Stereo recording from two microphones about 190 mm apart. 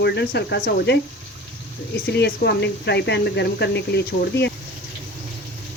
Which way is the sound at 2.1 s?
65° left (ahead or behind).